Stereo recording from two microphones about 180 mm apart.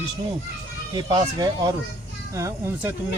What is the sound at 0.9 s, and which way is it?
Speech, 25° right (ahead or behind).